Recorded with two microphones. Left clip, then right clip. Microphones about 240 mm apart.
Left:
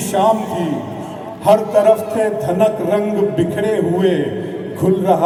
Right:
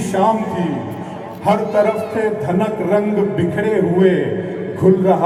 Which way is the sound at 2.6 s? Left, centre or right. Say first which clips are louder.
Left 3 dB; left.